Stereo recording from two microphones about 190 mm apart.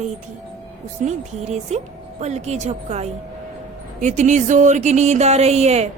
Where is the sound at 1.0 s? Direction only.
35° right (ahead or behind).